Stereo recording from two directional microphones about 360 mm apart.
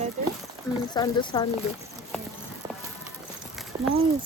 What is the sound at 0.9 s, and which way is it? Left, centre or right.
Speech, centre.